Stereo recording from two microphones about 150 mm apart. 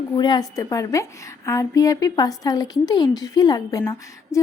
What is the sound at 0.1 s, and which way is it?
A woman's voice, 30° left (ahead or behind).